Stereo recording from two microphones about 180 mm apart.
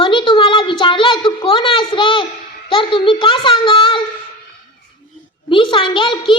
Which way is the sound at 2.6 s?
30° left (ahead or behind).